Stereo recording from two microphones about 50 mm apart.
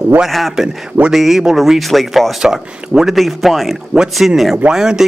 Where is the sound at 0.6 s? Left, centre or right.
Centre.